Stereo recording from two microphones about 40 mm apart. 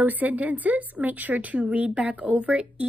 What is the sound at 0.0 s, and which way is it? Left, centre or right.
A woman's voice, right.